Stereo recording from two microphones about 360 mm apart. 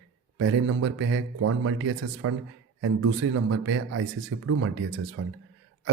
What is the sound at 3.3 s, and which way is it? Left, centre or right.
Speech, right.